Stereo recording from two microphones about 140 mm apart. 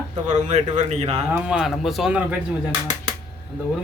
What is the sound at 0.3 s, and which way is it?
Speech, 55° right (ahead or behind).